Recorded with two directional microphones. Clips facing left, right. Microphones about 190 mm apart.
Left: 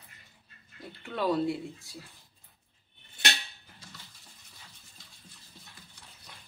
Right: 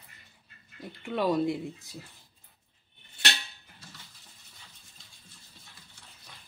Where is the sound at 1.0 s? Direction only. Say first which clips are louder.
Right 2 dB; 15° right (ahead or behind).